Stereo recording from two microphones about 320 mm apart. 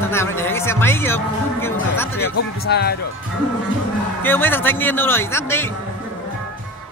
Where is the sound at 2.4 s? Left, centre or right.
Left.